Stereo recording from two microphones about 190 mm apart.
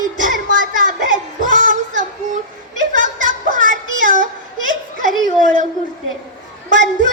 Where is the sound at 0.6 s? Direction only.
45° right (ahead or behind).